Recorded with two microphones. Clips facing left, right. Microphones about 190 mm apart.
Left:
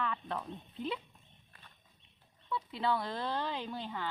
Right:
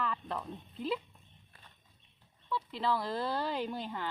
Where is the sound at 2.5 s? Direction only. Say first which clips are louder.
Even; centre (ahead or behind).